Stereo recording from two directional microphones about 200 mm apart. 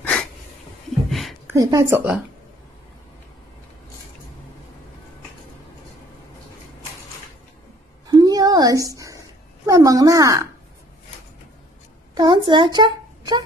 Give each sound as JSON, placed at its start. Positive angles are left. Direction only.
{"t": 0.0, "sound": "wheeze", "side_deg": 5}
{"t": 1.5, "sound": "a woman's voice", "side_deg": -15}
{"t": 8.1, "sound": "a sound", "side_deg": -20}
{"t": 9.7, "sound": "speech", "side_deg": -15}
{"t": 12.2, "sound": "a child's voice", "side_deg": -25}